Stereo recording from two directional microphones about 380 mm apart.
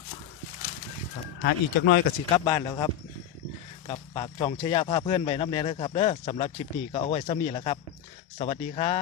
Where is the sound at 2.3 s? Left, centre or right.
Centre.